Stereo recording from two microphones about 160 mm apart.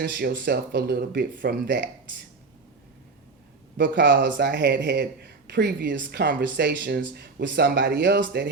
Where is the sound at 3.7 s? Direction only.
90° right.